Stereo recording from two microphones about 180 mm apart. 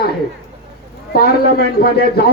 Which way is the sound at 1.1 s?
60° left (ahead or behind).